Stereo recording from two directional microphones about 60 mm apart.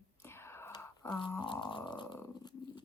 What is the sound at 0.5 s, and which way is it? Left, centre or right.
Whispering, left.